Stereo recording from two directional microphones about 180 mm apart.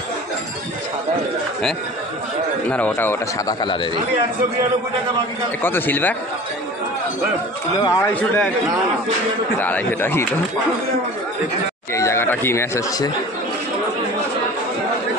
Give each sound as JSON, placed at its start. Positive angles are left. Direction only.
{"t": 2.7, "sound": "speech", "side_deg": 10}
{"t": 5.6, "sound": "speech", "side_deg": 10}
{"t": 7.8, "sound": "speech", "side_deg": 15}
{"t": 9.6, "sound": "speech", "side_deg": 10}
{"t": 11.9, "sound": "speech", "side_deg": 15}